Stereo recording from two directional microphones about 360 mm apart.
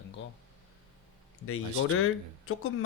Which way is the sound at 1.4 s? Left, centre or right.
Left.